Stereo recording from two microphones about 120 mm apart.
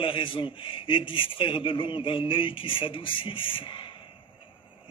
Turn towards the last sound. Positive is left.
turn(degrees=45)  # may be behind; listen again after turning